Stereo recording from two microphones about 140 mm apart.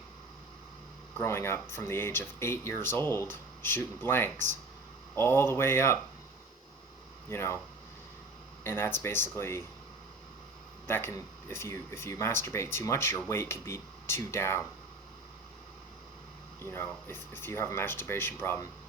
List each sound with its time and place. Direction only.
1.2 s speech: 20° left (ahead or behind)
7.3 s speech: 20° left (ahead or behind)
8.6 s speech: 15° left (ahead or behind)
10.8 s speech: 15° left (ahead or behind)
16.6 s speech: 15° left (ahead or behind)